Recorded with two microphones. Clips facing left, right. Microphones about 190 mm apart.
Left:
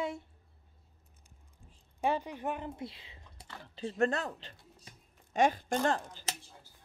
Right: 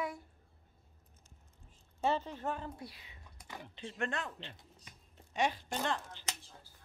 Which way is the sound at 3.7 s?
35° left (ahead or behind).